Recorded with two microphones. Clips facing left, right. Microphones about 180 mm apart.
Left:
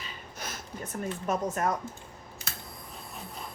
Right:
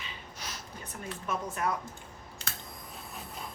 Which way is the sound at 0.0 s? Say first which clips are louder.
Left 3 dB; 45° left (ahead or behind).